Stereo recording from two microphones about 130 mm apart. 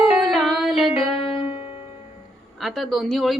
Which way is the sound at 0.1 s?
Centre (ahead or behind).